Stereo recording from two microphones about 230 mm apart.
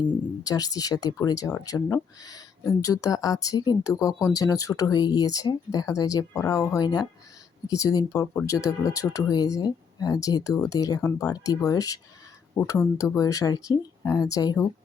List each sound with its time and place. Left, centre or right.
0.0 s speech: centre